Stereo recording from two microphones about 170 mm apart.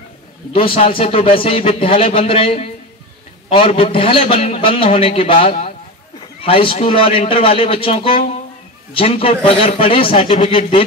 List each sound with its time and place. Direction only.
0.6 s a man's voice: 35° left (ahead or behind)